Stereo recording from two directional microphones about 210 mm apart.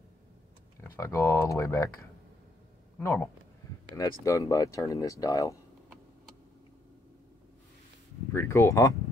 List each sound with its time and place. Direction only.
0.7 s speech: 15° left (ahead or behind)
3.0 s speech: 10° left (ahead or behind)
8.3 s speech: 15° left (ahead or behind)